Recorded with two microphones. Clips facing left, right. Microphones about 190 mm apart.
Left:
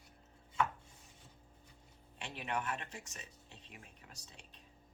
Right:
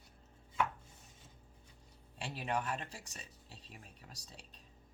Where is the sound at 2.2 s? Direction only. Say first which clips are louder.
Right 2 dB; 35° right (ahead or behind).